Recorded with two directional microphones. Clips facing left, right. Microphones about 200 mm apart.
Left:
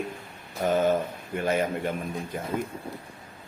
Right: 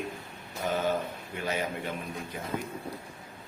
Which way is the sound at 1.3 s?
50° left (ahead or behind).